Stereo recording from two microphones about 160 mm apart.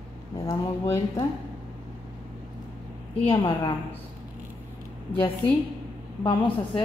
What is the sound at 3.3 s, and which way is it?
Speech, 35° left (ahead or behind).